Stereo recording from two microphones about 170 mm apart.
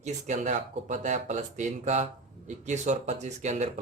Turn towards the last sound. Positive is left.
turn(degrees=-45)  # may be behind; listen again after turning